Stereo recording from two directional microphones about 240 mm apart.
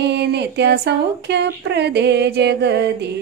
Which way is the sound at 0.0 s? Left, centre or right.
Right.